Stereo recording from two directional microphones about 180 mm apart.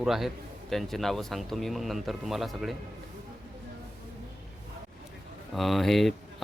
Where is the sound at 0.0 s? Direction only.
Centre (ahead or behind).